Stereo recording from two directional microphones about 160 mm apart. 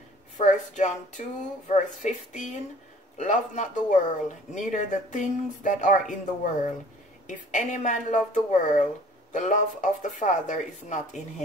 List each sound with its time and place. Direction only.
0.4 s speech: 50° left (ahead or behind)